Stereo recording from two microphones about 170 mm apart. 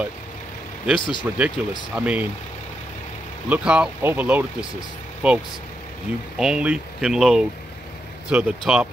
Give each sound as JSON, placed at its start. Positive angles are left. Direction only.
{"t": 0.9, "sound": "speech", "side_deg": 30}
{"t": 1.6, "sound": "speech", "side_deg": -5}
{"t": 3.4, "sound": "speech", "side_deg": -10}